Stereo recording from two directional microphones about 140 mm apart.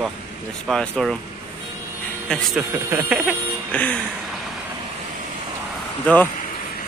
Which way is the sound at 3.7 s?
10° left (ahead or behind).